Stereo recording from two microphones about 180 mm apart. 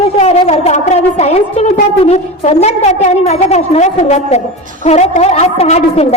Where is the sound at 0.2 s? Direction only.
35° left (ahead or behind).